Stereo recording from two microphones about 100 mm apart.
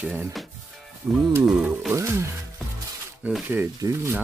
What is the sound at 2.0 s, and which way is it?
Speech, 25° right (ahead or behind).